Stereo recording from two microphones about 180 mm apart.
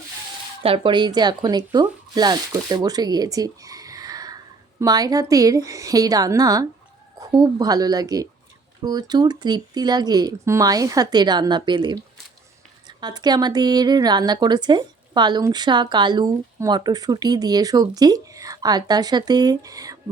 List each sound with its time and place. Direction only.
0.6 s a woman's voice: 30° right (ahead or behind)
13.0 s a woman's voice: 25° right (ahead or behind)